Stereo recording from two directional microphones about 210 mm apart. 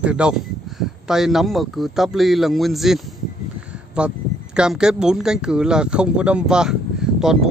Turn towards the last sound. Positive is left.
turn(degrees=-5)  # may be behind; listen again after turning